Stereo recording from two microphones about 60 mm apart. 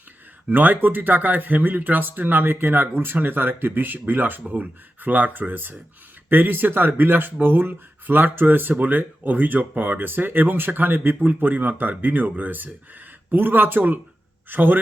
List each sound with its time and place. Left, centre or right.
0.4 s speech: right